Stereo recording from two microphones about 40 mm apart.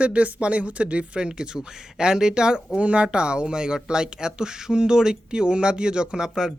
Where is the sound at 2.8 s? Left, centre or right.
Right; by 6.5 s centre.